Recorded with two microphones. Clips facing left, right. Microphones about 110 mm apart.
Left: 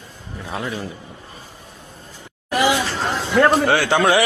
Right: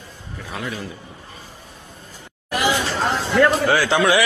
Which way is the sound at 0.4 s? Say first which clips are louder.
Left 3 dB; 25° left (ahead or behind).